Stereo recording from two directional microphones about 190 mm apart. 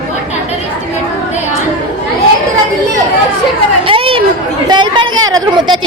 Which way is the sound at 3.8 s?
30° right (ahead or behind).